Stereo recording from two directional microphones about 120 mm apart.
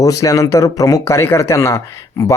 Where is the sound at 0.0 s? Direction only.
30° left (ahead or behind).